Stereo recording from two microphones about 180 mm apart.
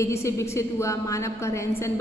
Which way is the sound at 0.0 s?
15° left (ahead or behind).